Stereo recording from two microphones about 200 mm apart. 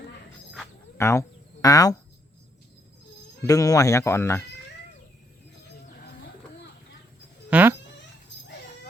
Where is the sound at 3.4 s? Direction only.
15° left (ahead or behind).